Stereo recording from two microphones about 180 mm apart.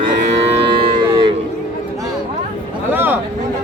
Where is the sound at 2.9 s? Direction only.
10° right (ahead or behind).